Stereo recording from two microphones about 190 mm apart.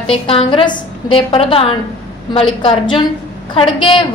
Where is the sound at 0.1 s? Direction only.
30° left (ahead or behind).